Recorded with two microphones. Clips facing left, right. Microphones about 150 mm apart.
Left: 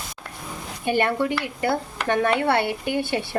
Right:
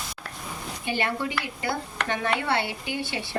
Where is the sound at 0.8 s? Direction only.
50° left (ahead or behind).